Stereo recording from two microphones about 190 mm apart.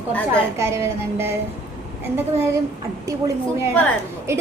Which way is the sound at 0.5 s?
15° right (ahead or behind).